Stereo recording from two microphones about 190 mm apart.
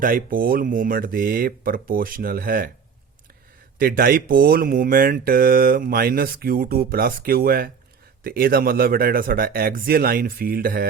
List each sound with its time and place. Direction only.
0.0 s speech: 50° right (ahead or behind)
3.8 s speech: 50° right (ahead or behind)